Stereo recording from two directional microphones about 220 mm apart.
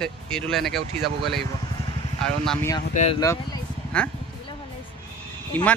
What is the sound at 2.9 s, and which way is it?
Speech, 35° left (ahead or behind).